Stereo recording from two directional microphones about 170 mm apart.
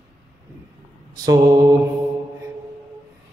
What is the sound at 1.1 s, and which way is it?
Mantra, 20° right (ahead or behind).